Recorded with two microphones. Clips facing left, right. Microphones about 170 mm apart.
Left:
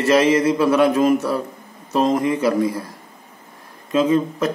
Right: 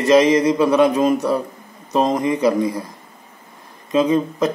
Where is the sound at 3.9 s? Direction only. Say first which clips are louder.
Right 1 dB; 15° right (ahead or behind).